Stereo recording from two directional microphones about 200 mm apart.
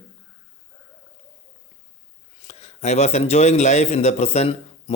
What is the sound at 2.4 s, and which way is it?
A man's voice, 30° left (ahead or behind).